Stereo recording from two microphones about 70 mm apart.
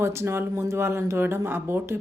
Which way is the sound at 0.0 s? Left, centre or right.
Right.